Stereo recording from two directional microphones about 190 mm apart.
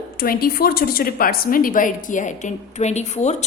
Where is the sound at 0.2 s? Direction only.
55° left (ahead or behind).